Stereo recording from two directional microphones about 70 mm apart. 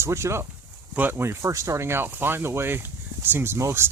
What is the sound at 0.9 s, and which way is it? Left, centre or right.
Speech, right.